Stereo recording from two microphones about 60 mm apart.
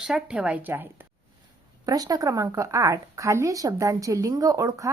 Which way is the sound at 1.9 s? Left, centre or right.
Right.